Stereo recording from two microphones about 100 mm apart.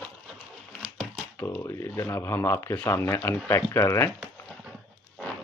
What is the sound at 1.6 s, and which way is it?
Speech, 30° left (ahead or behind).